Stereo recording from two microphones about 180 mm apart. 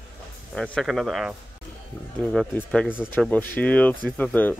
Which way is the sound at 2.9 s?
5° right (ahead or behind).